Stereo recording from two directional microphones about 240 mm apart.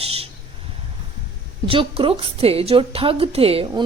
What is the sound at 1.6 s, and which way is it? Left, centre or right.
A woman's voice, right.